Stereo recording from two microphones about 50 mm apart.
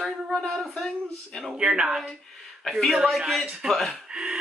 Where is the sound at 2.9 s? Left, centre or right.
Centre.